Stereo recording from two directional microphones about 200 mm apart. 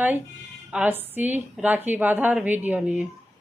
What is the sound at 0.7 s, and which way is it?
Speech, 10° right (ahead or behind).